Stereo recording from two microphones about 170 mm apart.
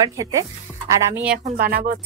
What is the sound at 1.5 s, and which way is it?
Speech, 60° right (ahead or behind).